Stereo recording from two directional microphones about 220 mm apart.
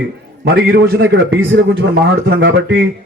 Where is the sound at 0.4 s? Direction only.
45° right (ahead or behind).